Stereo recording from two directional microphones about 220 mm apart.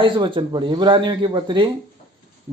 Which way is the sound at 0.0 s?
25° right (ahead or behind).